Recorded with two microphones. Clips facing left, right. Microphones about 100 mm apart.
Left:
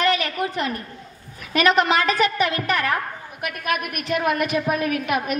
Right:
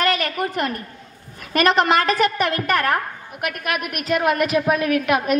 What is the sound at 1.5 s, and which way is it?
A woman's voice, 50° right (ahead or behind).